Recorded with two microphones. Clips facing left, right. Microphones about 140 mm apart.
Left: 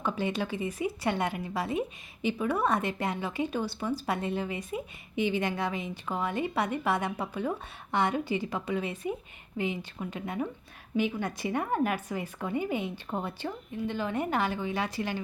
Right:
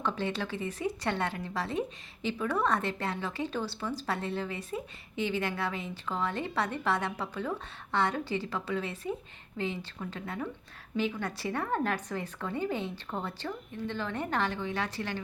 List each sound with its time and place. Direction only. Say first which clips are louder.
0.0 s a woman's voice: left 2 dB; 15° left (ahead or behind)